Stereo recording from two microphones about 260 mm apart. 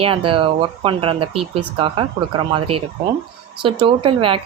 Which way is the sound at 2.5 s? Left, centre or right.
Centre.